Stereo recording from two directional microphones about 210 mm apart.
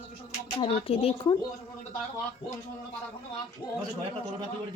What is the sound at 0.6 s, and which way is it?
Speech, 25° left (ahead or behind).